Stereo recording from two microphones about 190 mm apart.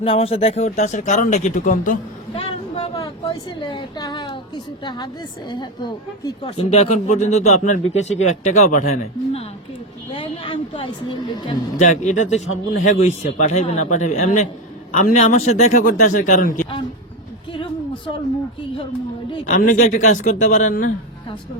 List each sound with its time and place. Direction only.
0.0 s speech: 30° left (ahead or behind)
2.3 s a sound: 35° left (ahead or behind)
3.0 s a woman's voice: 25° left (ahead or behind)
10.1 s speech: 25° left (ahead or behind)
11.8 s speech: 40° left (ahead or behind)
17.5 s a sound: 25° left (ahead or behind)
19.5 s speech: 45° left (ahead or behind)